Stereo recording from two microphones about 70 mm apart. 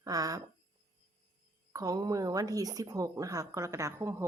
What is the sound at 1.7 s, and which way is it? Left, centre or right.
A woman's voice, right.